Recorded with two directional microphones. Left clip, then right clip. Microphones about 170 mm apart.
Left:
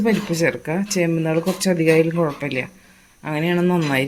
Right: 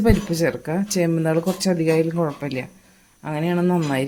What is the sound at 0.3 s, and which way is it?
Speech, 10° right (ahead or behind).